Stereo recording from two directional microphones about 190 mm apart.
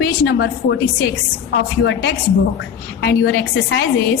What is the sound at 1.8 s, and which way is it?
A woman's voice, 60° left (ahead or behind).